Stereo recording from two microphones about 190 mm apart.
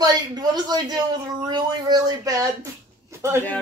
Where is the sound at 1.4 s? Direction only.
20° right (ahead or behind).